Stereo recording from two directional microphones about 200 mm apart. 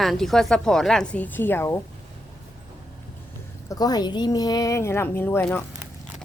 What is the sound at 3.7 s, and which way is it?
Speech, 20° left (ahead or behind).